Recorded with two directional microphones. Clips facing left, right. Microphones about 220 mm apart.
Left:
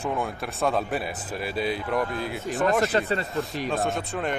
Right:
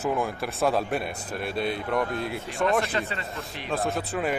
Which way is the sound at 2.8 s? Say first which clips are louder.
Left 6 dB; 40° left (ahead or behind).